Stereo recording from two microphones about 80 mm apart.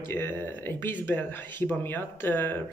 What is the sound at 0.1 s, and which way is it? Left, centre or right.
Speech, left.